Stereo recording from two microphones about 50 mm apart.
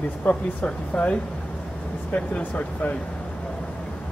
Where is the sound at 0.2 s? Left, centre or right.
Left.